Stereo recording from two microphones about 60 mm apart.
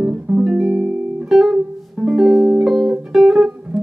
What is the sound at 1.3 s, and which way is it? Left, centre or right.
Music, centre.